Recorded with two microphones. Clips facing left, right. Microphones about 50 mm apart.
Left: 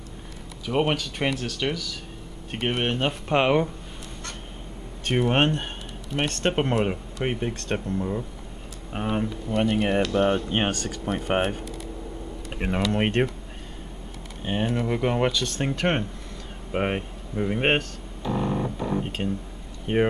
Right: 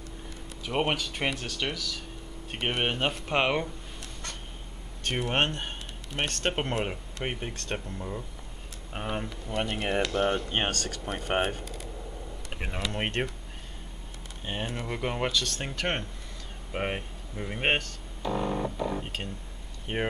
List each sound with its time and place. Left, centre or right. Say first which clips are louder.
0.7 s speech: left 4 dB; centre
5.2 s speech: left 6 dB; centre
14.4 s speech: left 8 dB; centre